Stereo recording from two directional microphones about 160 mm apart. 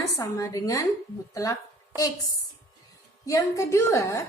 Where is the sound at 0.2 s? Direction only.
20° left (ahead or behind).